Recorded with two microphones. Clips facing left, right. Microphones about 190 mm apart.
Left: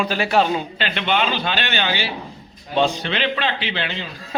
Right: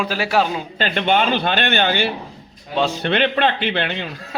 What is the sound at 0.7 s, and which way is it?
A man's voice, 45° right (ahead or behind).